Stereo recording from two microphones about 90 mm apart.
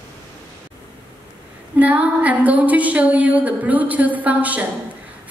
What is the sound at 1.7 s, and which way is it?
A woman's voice, 15° right (ahead or behind).